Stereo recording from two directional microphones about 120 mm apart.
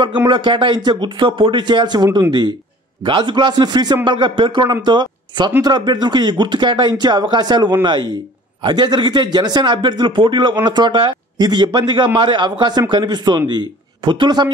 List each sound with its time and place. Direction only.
0.3 s a man's voice: 45° right (ahead or behind)